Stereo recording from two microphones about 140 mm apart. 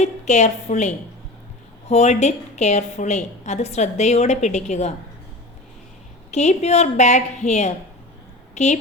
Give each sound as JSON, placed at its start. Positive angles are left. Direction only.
{"t": 0.0, "sound": "a woman's voice", "side_deg": 55}
{"t": 6.3, "sound": "a woman's voice", "side_deg": 55}